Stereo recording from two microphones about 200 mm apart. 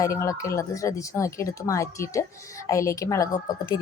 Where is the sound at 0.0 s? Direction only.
15° left (ahead or behind).